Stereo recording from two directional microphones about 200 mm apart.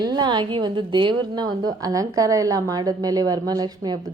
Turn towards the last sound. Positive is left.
turn(degrees=-20)  # may be behind; listen again after turning